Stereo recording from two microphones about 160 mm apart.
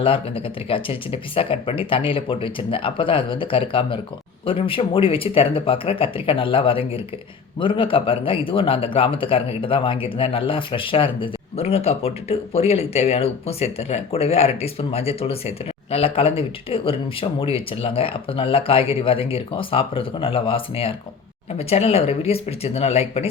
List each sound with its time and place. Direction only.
0.0 s speech: 35° left (ahead or behind)